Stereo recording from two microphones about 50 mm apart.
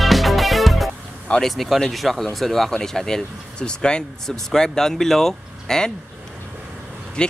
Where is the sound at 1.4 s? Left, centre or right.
Centre.